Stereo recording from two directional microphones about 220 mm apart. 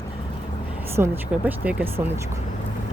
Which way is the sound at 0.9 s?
10° right (ahead or behind).